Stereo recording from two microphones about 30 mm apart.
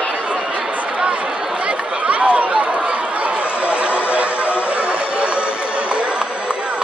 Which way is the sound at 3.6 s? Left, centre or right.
Right.